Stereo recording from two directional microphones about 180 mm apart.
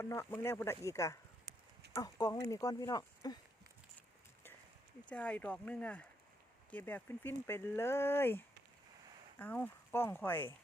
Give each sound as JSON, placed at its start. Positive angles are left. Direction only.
{"t": 0.0, "sound": "speech", "side_deg": 15}
{"t": 1.5, "sound": "a sound", "side_deg": -40}
{"t": 2.0, "sound": "speech", "side_deg": 20}
{"t": 5.0, "sound": "speech", "side_deg": 5}